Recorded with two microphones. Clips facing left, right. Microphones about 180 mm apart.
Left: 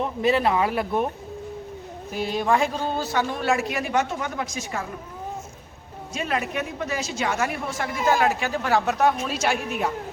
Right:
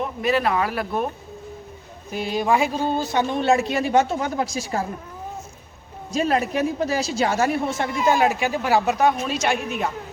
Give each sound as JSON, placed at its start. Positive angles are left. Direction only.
{"t": 0.2, "sound": "speech", "side_deg": 25}
{"t": 2.1, "sound": "a woman's voice", "side_deg": 0}
{"t": 6.1, "sound": "a woman's voice", "side_deg": -35}